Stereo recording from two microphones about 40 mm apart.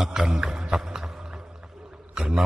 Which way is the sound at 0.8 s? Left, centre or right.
Centre.